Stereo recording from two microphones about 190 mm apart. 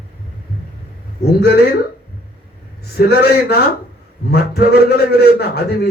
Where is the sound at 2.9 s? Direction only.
60° left (ahead or behind).